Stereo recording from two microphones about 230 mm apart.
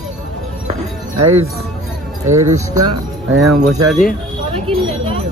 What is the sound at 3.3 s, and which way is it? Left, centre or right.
Speech, right.